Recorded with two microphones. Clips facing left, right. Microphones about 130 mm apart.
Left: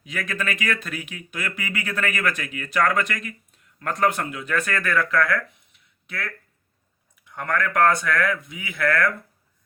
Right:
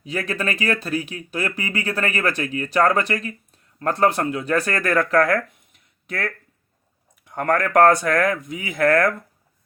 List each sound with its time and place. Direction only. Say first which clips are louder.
0.0 s speech: right 4 dB; 35° right (ahead or behind)
5.7 s a sound: right 5 dB; 45° right (ahead or behind)
7.3 s speech: right 5 dB; 45° right (ahead or behind)